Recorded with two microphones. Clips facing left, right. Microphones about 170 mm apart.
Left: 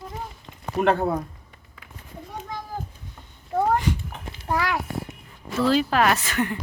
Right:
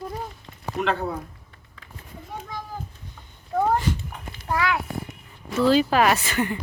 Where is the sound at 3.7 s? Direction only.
15° left (ahead or behind).